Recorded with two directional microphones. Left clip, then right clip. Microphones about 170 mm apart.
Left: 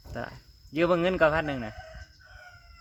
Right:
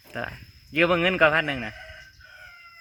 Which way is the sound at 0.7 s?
10° right (ahead or behind).